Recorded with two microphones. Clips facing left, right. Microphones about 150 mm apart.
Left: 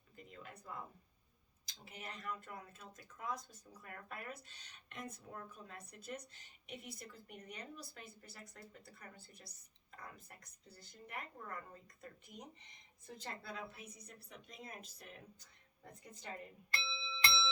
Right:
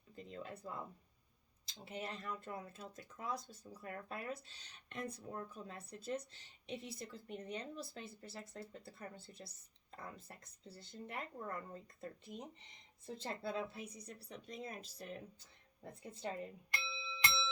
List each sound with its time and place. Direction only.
0.2 s speech: 30° right (ahead or behind)
16.7 s bell: 15° right (ahead or behind)